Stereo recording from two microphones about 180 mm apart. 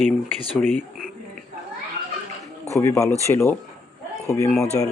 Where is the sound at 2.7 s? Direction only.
15° left (ahead or behind).